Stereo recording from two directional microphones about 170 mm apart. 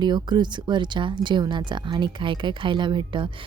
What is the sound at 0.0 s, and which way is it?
A woman's voice, 25° right (ahead or behind).